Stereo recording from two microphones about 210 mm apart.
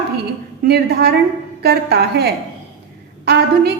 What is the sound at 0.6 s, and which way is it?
A woman's voice, 50° right (ahead or behind).